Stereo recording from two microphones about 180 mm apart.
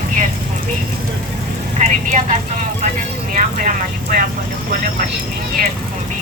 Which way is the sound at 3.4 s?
50° right (ahead or behind).